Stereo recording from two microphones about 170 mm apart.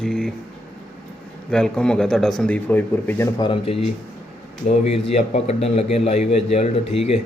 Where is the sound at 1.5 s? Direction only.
5° left (ahead or behind).